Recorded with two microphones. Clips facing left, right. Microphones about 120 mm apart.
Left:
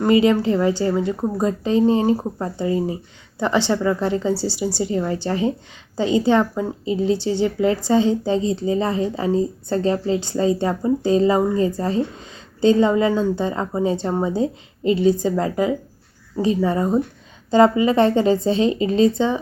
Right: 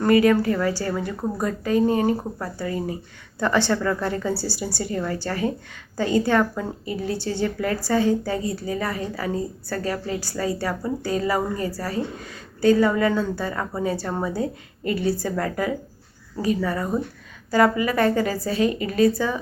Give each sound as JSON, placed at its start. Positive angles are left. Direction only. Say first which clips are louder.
{"t": 0.0, "sound": "a woman's voice", "louder": "left 1 dB", "side_deg": 20}